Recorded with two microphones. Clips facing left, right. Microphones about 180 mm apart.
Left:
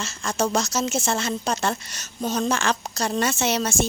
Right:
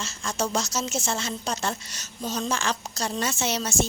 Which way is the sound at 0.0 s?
55° left (ahead or behind).